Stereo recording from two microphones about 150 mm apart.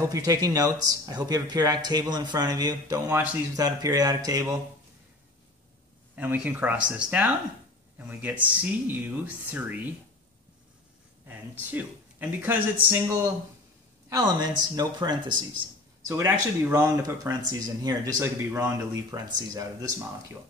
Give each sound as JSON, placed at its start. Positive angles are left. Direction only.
{"t": 0.1, "sound": "speech", "side_deg": -25}
{"t": 6.1, "sound": "speech", "side_deg": -10}
{"t": 11.6, "sound": "speech", "side_deg": -10}
{"t": 14.0, "sound": "speech", "side_deg": -25}
{"t": 16.1, "sound": "speech", "side_deg": -15}